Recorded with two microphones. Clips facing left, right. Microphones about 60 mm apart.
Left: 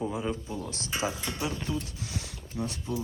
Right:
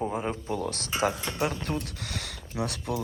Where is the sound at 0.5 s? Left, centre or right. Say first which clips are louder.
Right 4 dB; right.